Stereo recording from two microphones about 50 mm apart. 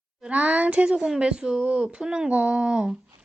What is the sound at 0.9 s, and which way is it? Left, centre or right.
Speech, centre.